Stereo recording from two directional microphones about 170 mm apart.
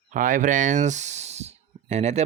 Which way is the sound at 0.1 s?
50° right (ahead or behind).